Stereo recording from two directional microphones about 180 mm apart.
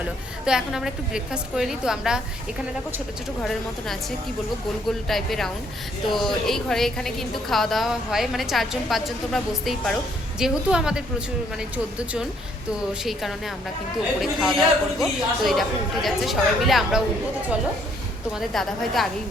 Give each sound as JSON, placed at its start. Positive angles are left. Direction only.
{"t": 0.0, "sound": "a woman's voice", "side_deg": -5}
{"t": 3.4, "sound": "a woman's voice", "side_deg": 0}
{"t": 18.3, "sound": "a woman's voice", "side_deg": 0}